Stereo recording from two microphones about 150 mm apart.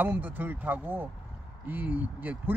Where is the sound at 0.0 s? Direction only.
10° right (ahead or behind).